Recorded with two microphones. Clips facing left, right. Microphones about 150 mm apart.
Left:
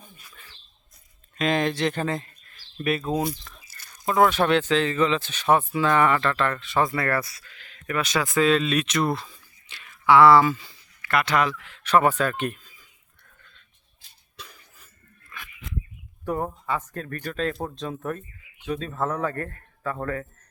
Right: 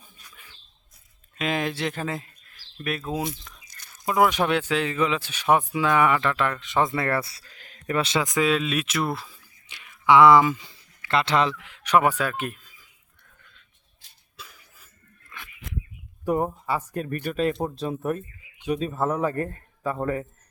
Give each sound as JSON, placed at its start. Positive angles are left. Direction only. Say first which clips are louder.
{"t": 0.3, "sound": "a sound", "louder": "left 1 dB", "side_deg": -10}
{"t": 1.4, "sound": "speech", "louder": "left 3 dB", "side_deg": -5}
{"t": 4.3, "sound": "speech", "louder": "left 2 dB", "side_deg": -10}
{"t": 7.9, "sound": "speech", "louder": "even", "side_deg": -25}
{"t": 9.7, "sound": "speech", "louder": "even", "side_deg": -15}
{"t": 14.3, "sound": "cough", "louder": "left 1 dB", "side_deg": -5}
{"t": 16.2, "sound": "speech", "louder": "right 3 dB", "side_deg": -10}